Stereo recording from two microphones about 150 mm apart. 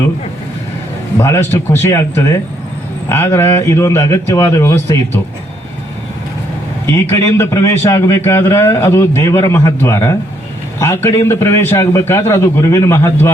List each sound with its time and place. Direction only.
1.2 s a man's voice: 15° left (ahead or behind)
6.8 s a man's voice: 15° left (ahead or behind)